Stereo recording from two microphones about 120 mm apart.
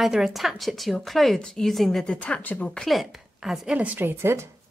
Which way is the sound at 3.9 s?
20° right (ahead or behind).